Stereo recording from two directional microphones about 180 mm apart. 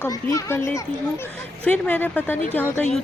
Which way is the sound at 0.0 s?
20° left (ahead or behind).